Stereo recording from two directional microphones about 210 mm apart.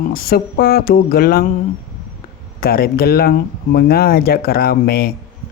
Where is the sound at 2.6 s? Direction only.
45° left (ahead or behind).